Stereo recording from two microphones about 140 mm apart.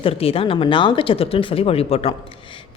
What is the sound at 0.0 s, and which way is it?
A woman's voice, 40° left (ahead or behind).